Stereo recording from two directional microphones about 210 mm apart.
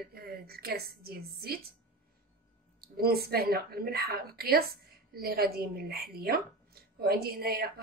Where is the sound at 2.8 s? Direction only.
45° right (ahead or behind).